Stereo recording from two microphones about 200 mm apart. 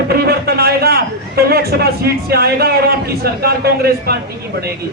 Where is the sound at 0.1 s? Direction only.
50° right (ahead or behind).